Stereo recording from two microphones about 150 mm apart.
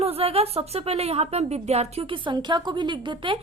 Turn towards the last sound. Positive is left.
turn(degrees=-35)  # may be behind; listen again after turning